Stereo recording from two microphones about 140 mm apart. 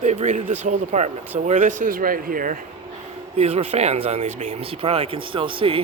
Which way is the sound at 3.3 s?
50° right (ahead or behind).